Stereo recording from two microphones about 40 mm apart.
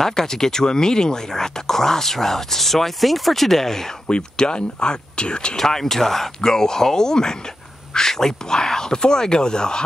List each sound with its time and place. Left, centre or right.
0.0 s speech: centre
4.1 s speech: left
5.6 s speech: centre